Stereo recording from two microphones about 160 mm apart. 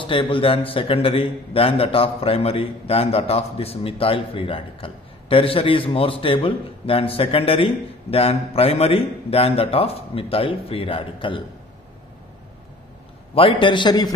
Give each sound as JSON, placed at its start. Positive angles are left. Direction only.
{"t": 0.0, "sound": "a man's voice", "side_deg": 30}
{"t": 13.3, "sound": "a man's voice", "side_deg": 35}